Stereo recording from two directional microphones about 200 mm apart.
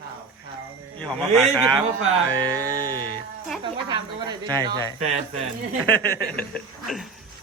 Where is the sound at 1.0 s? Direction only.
Centre (ahead or behind).